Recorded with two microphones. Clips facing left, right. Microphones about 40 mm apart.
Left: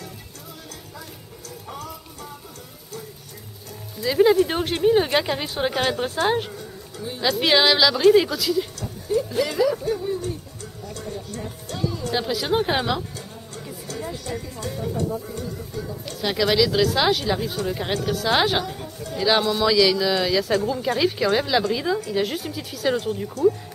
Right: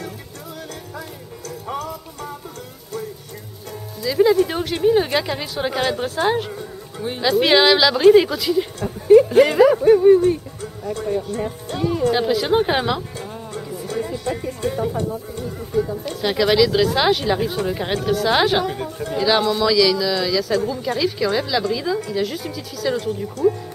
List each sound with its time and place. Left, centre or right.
4.0 s a woman's voice: centre
6.5 s music: right
7.2 s a woman's voice: centre
8.8 s speech: right
11.8 s speech: right
12.1 s a woman's voice: centre
13.2 s music: right
14.3 s speech: right
15.0 s a woman's voice: centre
15.3 s speech: right
16.2 s a woman's voice: centre
18.7 s speech: right
19.2 s a woman's voice: centre; by 23.1 s left